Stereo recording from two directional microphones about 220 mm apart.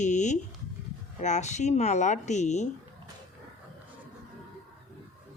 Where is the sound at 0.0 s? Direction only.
35° left (ahead or behind).